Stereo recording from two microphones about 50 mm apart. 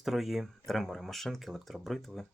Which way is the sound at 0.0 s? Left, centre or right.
Centre.